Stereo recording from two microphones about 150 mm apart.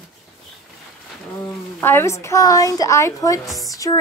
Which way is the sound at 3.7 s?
25° left (ahead or behind).